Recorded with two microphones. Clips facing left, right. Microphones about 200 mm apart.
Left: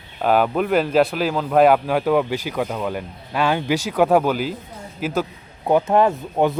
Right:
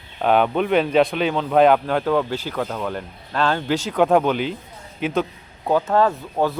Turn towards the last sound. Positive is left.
turn(degrees=15)  # may be behind; listen again after turning